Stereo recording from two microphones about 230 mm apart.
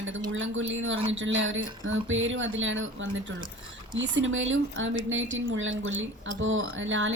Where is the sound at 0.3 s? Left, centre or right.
Right.